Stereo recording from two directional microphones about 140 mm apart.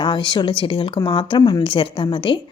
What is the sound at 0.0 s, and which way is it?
Speech, 35° left (ahead or behind).